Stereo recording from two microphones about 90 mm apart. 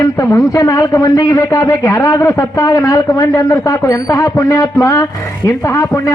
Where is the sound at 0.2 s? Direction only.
40° left (ahead or behind).